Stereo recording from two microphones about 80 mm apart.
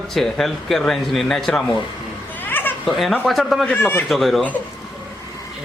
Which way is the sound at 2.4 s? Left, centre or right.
Left.